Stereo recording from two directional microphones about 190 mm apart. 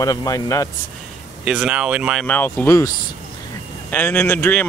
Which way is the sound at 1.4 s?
5° right (ahead or behind).